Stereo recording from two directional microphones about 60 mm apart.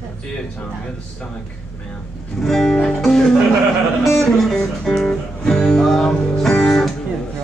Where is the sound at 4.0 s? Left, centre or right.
Centre.